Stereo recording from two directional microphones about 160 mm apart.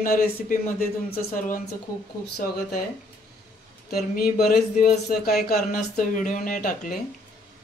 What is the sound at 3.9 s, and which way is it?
Speech, 75° left (ahead or behind).